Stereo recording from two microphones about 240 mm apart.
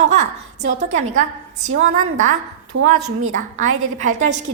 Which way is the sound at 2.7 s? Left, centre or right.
Right.